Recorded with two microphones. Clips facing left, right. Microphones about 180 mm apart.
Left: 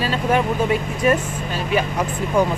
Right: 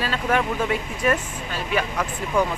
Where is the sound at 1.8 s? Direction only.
20° left (ahead or behind).